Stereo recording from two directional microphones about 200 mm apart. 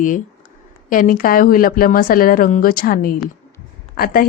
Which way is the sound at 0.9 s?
45° left (ahead or behind).